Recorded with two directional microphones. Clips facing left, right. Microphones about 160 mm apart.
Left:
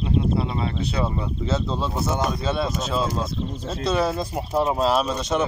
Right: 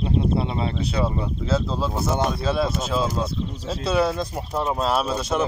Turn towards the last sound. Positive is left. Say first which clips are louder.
# left 1 dB
turn(degrees=-5)  # may be behind; listen again after turning